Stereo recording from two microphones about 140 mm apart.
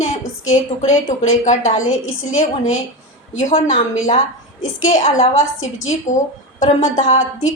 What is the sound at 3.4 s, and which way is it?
A woman's voice, 60° left (ahead or behind).